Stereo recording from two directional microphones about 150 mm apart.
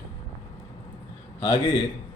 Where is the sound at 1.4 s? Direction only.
30° left (ahead or behind).